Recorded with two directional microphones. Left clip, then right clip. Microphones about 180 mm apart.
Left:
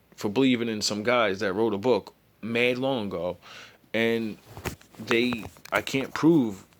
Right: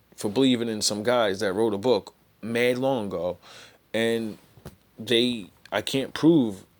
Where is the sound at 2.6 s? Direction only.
15° right (ahead or behind).